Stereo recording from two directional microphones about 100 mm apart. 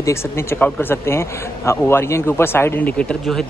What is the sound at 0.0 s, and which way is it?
A man's voice, 25° left (ahead or behind).